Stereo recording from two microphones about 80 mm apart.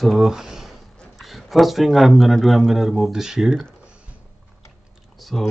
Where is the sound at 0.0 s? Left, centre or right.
Centre.